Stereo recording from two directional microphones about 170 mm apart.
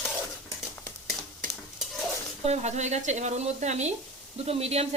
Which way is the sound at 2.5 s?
40° right (ahead or behind).